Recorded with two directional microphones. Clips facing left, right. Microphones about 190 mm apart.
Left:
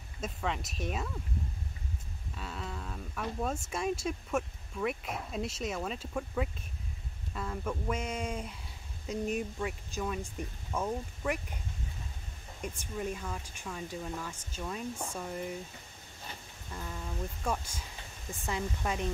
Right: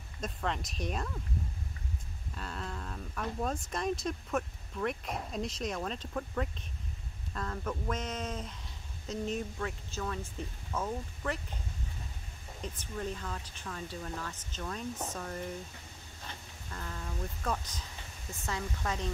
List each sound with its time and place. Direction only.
0.2 s speech: 5° left (ahead or behind)
2.3 s speech: centre (ahead or behind)
12.6 s speech: 10° left (ahead or behind)